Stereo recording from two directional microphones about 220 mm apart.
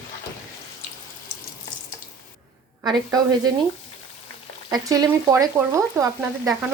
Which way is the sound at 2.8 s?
15° right (ahead or behind).